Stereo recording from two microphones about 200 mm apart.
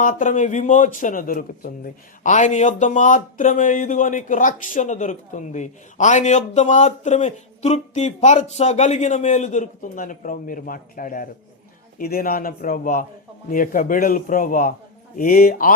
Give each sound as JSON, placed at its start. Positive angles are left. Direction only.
{"t": 0.0, "sound": "a man's voice", "side_deg": 40}